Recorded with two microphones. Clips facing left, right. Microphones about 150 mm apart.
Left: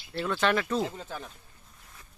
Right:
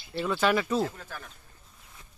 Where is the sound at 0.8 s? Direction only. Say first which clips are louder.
Right 1 dB; 20° left (ahead or behind).